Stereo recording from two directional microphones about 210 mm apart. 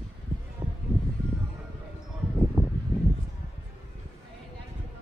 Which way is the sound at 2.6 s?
10° right (ahead or behind).